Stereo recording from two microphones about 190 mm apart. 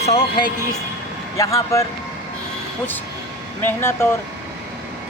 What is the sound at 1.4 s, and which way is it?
Speech, 15° left (ahead or behind).